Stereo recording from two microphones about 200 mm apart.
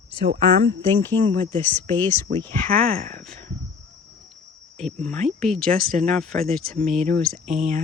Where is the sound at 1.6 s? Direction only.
10° left (ahead or behind).